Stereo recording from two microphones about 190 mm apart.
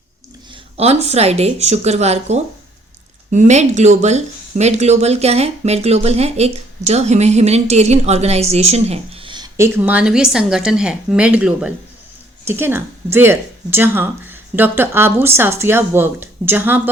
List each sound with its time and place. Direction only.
0.5 s a woman's voice: 35° right (ahead or behind); by 16.9 s 10° right (ahead or behind)